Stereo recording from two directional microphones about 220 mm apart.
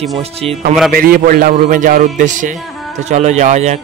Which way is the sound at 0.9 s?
40° right (ahead or behind).